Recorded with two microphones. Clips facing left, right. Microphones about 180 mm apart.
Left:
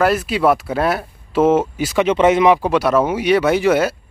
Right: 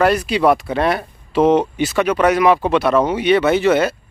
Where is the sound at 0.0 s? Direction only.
Centre (ahead or behind).